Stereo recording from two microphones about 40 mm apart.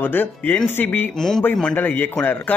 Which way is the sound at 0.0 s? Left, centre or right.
Left.